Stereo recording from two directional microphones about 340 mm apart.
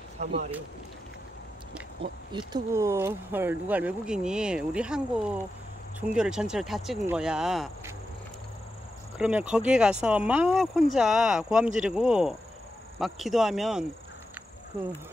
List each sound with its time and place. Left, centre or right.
0.2 s speech: right
2.3 s speech: centre
9.2 s speech: centre